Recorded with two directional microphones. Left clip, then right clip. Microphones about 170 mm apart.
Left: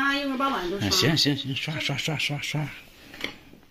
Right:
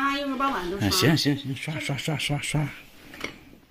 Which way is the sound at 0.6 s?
25° right (ahead or behind).